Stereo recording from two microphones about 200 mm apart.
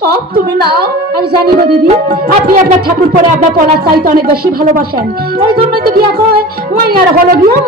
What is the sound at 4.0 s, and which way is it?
A woman's voice, 50° right (ahead or behind).